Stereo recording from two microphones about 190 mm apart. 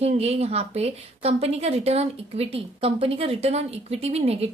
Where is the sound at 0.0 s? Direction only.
30° right (ahead or behind).